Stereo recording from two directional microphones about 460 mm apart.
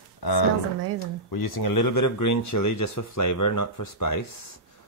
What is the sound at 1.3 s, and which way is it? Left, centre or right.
Speech, left.